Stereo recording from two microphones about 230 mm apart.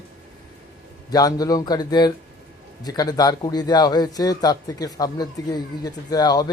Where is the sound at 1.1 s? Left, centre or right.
Centre.